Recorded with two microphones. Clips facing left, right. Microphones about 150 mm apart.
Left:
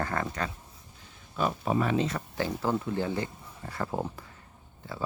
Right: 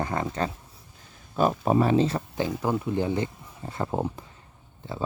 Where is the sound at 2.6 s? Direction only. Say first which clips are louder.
Right 3 dB; 15° right (ahead or behind).